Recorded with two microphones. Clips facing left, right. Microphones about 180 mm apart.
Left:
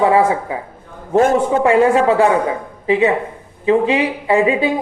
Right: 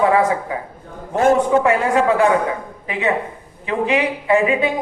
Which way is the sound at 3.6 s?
30° left (ahead or behind).